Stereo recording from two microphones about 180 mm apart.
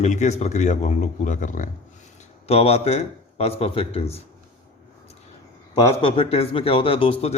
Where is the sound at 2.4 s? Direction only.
35° left (ahead or behind).